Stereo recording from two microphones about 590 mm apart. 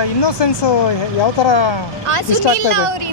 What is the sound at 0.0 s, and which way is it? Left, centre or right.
Speech, left.